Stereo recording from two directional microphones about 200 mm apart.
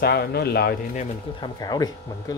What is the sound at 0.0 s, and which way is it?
Speech, 55° left (ahead or behind).